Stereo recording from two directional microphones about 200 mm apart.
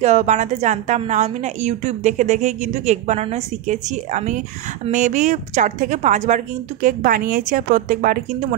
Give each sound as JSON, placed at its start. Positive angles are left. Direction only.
{"t": 0.0, "sound": "a woman's voice", "side_deg": -35}